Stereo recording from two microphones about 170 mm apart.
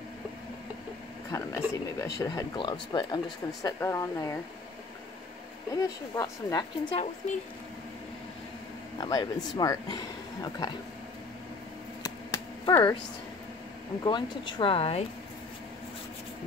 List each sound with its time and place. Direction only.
1.3 s speech: 20° left (ahead or behind)
3.6 s speech: 15° left (ahead or behind)
5.7 s speech: 20° left (ahead or behind)
8.9 s speech: 25° left (ahead or behind)
12.0 s a sound: 20° left (ahead or behind)
14.0 s speech: 25° left (ahead or behind)